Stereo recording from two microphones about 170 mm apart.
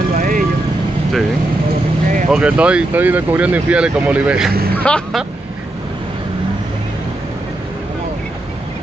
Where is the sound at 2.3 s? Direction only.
5° right (ahead or behind).